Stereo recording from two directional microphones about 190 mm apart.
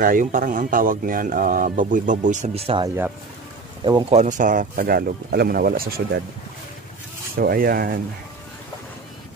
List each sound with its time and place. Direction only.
0.0 s speech: 45° right (ahead or behind)
4.1 s speech: 40° right (ahead or behind)
7.3 s speech: 50° right (ahead or behind)